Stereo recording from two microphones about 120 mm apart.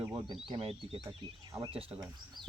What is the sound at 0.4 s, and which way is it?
Speech, 50° right (ahead or behind).